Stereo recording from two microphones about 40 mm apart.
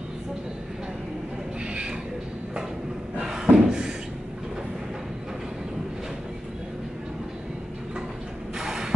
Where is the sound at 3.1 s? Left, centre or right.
Centre.